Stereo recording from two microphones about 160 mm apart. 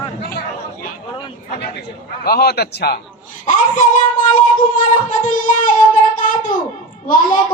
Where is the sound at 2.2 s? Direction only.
75° left (ahead or behind).